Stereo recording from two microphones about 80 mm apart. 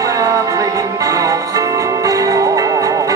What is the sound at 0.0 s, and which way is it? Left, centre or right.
Music, right.